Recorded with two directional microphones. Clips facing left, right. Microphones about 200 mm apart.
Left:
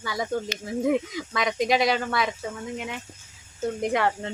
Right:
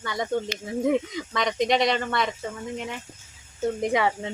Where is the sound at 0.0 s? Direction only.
5° left (ahead or behind).